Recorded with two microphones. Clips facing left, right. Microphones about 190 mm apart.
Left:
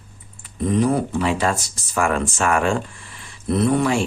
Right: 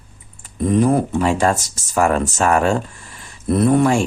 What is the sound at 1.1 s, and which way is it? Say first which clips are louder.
Speech: right 4 dB; 45° right (ahead or behind).